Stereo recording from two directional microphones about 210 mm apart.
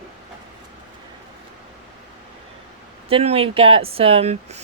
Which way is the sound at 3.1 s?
25° right (ahead or behind).